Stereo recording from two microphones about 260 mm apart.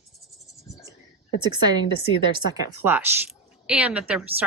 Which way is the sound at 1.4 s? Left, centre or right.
Centre.